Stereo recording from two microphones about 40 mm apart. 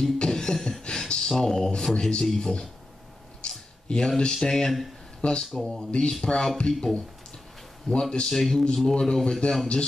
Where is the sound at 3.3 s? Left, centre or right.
Left.